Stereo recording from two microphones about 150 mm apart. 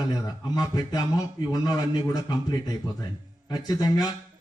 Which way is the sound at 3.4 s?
25° left (ahead or behind).